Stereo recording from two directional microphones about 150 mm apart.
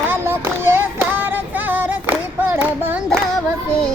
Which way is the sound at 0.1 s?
15° right (ahead or behind).